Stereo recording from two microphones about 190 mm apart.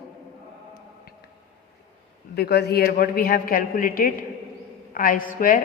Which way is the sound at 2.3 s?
55° left (ahead or behind).